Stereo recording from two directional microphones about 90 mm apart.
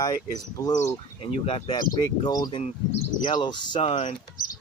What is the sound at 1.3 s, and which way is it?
Speech, 90° left.